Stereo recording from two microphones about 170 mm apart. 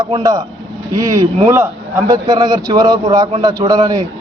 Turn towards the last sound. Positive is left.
turn(degrees=-20)  # may be behind; listen again after turning